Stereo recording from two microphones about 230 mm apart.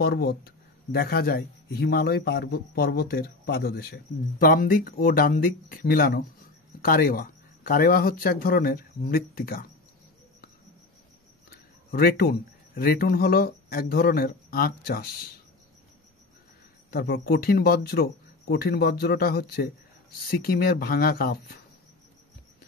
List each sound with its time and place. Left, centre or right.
0.0 s a man's voice: left
11.5 s speech: left
16.9 s a man's voice: left